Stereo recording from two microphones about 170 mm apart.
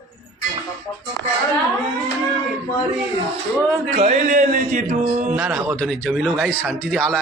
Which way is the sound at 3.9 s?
40° right (ahead or behind).